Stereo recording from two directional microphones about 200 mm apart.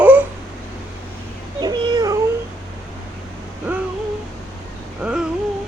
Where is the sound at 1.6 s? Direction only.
20° right (ahead or behind).